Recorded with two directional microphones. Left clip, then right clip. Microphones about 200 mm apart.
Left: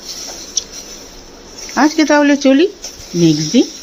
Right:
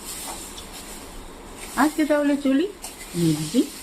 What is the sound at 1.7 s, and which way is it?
Speech, 35° left (ahead or behind).